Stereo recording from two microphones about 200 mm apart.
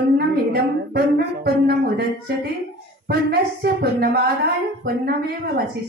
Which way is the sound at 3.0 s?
50° right (ahead or behind).